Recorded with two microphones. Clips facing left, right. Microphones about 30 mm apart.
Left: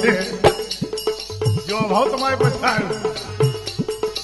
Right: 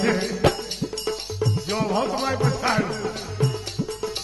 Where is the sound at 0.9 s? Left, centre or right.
Left.